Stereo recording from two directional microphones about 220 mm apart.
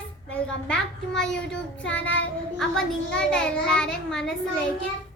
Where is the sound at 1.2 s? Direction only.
5° left (ahead or behind).